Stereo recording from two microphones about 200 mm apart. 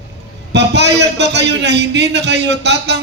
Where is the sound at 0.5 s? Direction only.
60° right (ahead or behind).